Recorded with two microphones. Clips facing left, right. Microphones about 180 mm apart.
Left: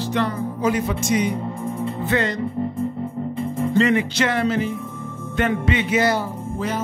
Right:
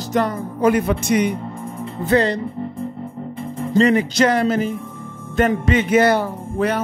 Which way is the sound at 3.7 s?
40° right (ahead or behind).